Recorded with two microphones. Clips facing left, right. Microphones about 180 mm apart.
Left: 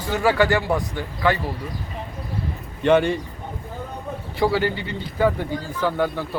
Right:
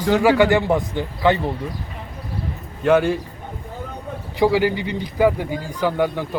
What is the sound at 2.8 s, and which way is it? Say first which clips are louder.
Speech: right 1 dB; 5° right (ahead or behind).